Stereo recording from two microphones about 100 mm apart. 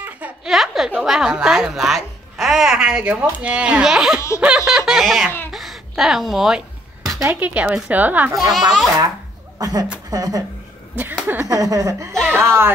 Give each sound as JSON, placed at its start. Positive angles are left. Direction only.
{"t": 0.5, "sound": "a woman's voice", "side_deg": -5}
{"t": 5.5, "sound": "a sound", "side_deg": 0}
{"t": 7.2, "sound": "speech", "side_deg": -15}
{"t": 8.4, "sound": "a woman's voice", "side_deg": 0}
{"t": 9.6, "sound": "speech", "side_deg": -40}
{"t": 11.4, "sound": "speech", "side_deg": -35}
{"t": 12.3, "sound": "speech", "side_deg": -25}